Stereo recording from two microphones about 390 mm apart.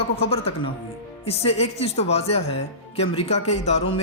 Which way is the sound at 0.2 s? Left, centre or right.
Centre.